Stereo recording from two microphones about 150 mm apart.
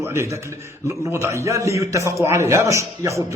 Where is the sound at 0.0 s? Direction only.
15° right (ahead or behind).